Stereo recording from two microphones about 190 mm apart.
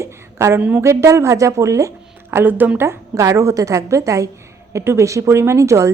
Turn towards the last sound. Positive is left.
turn(degrees=-15)  # may be behind; listen again after turning